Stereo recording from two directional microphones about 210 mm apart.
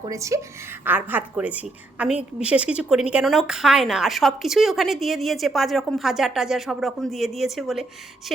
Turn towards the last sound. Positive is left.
turn(degrees=0)  # may be behind; listen again after turning